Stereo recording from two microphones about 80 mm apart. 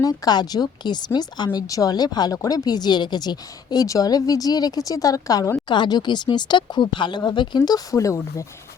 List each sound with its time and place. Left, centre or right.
0.0 s speech: left
1.5 s speech: left
5.6 s speech: left
7.9 s speech: left